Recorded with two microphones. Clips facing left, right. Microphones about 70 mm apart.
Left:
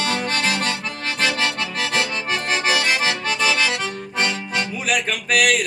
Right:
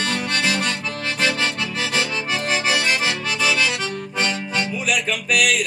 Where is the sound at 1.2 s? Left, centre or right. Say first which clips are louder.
Even; left.